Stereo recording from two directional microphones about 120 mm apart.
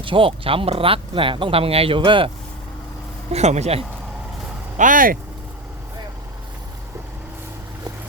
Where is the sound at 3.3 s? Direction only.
70° right (ahead or behind).